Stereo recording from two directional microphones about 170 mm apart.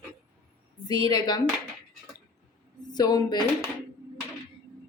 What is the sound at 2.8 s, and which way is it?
Dishes, 25° left (ahead or behind).